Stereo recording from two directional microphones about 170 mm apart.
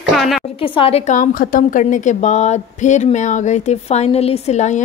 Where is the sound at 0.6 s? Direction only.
30° left (ahead or behind).